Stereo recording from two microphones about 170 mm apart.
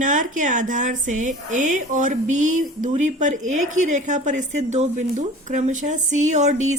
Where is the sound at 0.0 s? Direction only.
50° right (ahead or behind).